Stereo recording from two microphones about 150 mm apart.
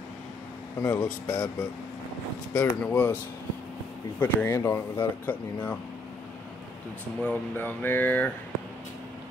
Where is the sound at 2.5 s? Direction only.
15° left (ahead or behind).